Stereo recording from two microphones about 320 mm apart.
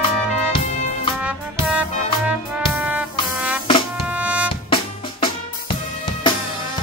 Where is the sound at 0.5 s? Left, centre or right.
Centre.